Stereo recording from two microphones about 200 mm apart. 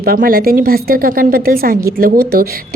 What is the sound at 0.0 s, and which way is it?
A woman's voice, 45° right (ahead or behind).